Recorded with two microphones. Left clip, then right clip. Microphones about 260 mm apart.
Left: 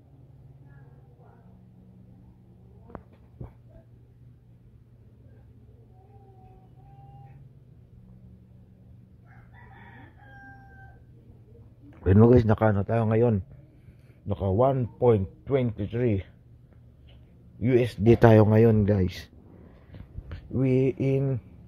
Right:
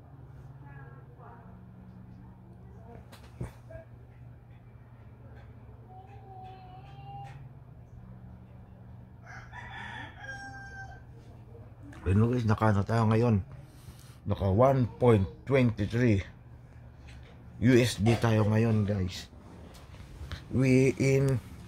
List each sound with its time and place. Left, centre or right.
12.0 s speech: left; by 16.3 s centre
17.6 s speech: centre
18.0 s speech: left
20.2 s speech: centre